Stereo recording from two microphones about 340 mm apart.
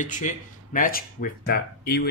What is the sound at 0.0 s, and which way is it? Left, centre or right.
Speech, left.